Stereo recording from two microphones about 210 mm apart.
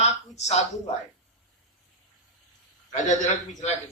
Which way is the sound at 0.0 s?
30° left (ahead or behind).